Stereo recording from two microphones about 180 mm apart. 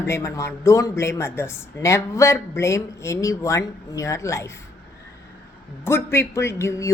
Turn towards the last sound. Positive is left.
turn(degrees=15)  # may be behind; listen again after turning